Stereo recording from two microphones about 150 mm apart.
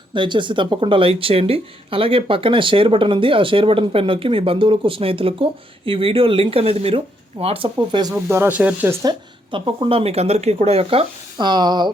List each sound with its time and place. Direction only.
0.1 s speech: 30° right (ahead or behind)
9.5 s speech: 35° right (ahead or behind)